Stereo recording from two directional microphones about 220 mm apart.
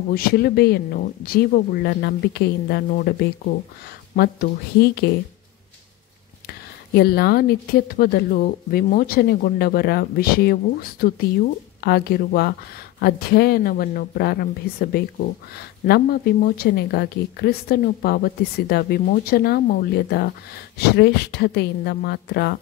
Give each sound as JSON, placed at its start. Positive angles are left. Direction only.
{"t": 0.1, "sound": "speech", "side_deg": 45}
{"t": 6.4, "sound": "speech", "side_deg": 45}